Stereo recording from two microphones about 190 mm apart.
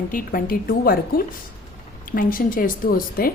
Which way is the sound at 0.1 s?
45° left (ahead or behind).